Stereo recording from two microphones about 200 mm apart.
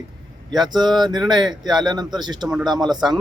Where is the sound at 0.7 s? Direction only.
20° right (ahead or behind).